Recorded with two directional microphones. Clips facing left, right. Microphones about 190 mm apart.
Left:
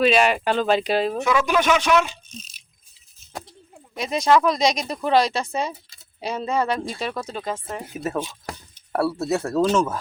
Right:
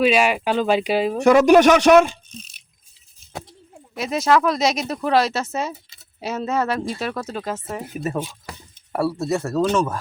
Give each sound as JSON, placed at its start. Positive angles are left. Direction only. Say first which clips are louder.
{"t": 0.0, "sound": "speech", "louder": "even", "side_deg": -10}
{"t": 1.2, "sound": "speech", "louder": "right 9 dB", "side_deg": -40}
{"t": 2.0, "sound": "speech", "louder": "right 7 dB", "side_deg": -55}
{"t": 3.9, "sound": "speech", "louder": "even", "side_deg": -5}
{"t": 9.2, "sound": "speech", "louder": "right 1 dB", "side_deg": 0}